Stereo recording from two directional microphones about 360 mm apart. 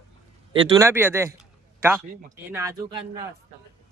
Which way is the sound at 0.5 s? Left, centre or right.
Centre.